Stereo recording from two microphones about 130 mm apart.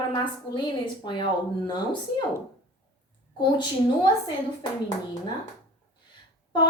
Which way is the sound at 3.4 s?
35° left (ahead or behind).